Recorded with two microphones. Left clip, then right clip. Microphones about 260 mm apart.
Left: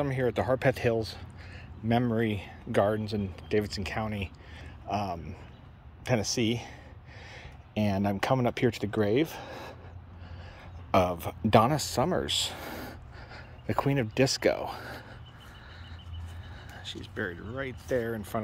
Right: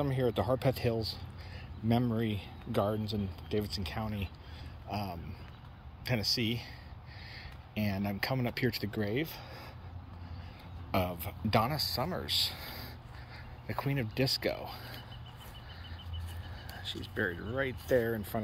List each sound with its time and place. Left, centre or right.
0.0 s speech: centre; by 9.8 s left
10.9 s speech: centre
16.7 s speech: centre